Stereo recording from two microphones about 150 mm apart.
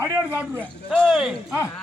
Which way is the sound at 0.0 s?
15° right (ahead or behind).